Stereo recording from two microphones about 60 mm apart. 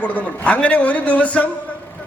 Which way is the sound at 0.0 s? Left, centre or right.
Left.